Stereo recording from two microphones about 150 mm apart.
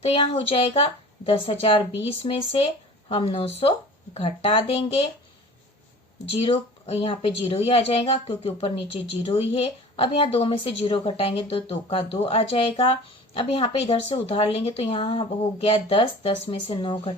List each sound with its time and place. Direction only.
0.0 s speech: 40° left (ahead or behind)
6.4 s speech: 40° left (ahead or behind)